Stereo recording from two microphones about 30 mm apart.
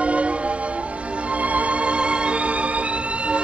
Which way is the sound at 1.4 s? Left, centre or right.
Right.